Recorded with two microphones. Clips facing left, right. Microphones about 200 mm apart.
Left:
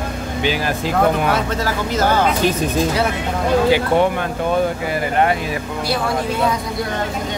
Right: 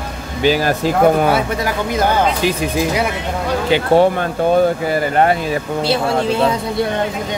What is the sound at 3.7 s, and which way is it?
Speech, 35° right (ahead or behind).